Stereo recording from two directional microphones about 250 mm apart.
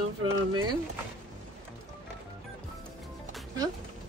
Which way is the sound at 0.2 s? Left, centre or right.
Right.